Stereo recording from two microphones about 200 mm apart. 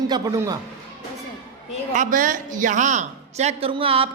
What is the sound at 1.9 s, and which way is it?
A woman's voice, 40° right (ahead or behind).